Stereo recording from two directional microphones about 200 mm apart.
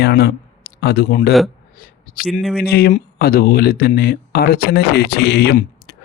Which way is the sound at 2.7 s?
50° left (ahead or behind).